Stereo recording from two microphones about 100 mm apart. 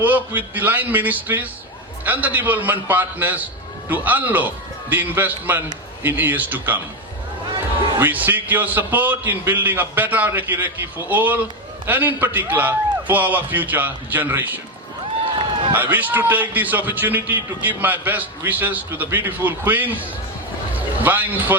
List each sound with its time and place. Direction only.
0.0 s a man's voice: 15° right (ahead or behind)
7.9 s a man's voice: 20° right (ahead or behind)
15.7 s a man's voice: 20° right (ahead or behind)
20.7 s a sound: 15° right (ahead or behind)